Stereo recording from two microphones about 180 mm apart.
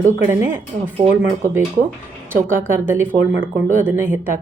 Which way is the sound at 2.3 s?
10° right (ahead or behind).